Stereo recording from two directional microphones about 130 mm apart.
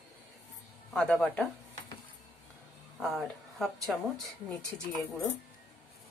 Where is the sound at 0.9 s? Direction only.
5° left (ahead or behind).